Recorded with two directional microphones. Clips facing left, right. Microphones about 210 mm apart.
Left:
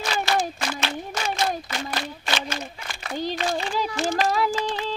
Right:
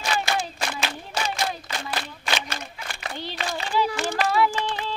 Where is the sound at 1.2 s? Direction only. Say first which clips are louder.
Right 1 dB; 35° right (ahead or behind).